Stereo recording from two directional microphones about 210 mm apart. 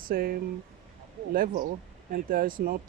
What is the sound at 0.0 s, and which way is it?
Speech, 45° right (ahead or behind).